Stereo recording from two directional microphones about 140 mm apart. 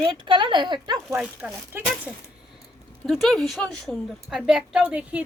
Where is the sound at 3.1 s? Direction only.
Centre (ahead or behind).